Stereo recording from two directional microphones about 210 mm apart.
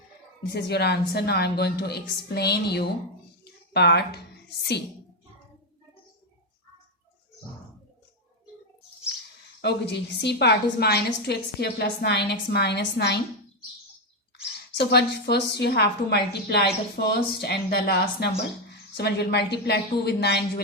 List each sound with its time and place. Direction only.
0.5 s a woman's voice: 50° left (ahead or behind)
3.4 s a sound: 50° left (ahead or behind)
9.6 s a woman's voice: 55° left (ahead or behind)
14.8 s a woman's voice: 50° left (ahead or behind)